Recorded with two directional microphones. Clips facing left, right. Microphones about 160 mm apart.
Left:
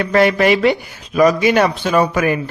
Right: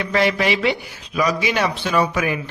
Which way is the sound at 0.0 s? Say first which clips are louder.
Left 6 dB; 50° left (ahead or behind).